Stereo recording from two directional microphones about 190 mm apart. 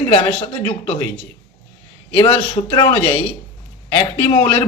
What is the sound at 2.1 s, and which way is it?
A man's voice, 25° left (ahead or behind).